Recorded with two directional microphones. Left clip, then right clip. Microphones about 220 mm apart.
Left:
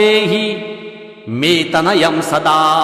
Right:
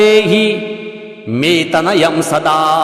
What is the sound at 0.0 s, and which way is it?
Mantra, 25° right (ahead or behind).